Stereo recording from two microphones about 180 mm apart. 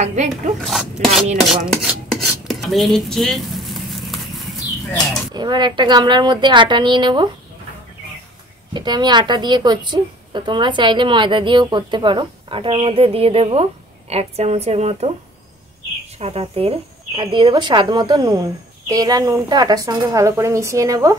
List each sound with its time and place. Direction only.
0.0 s speech: 40° right (ahead or behind)
0.6 s speech: centre (ahead or behind)
1.7 s dishes: centre (ahead or behind)
5.3 s a woman's voice: 25° right (ahead or behind)
8.7 s a woman's voice: 25° right (ahead or behind)
16.2 s a woman's voice: 35° right (ahead or behind); by 21.2 s 20° right (ahead or behind)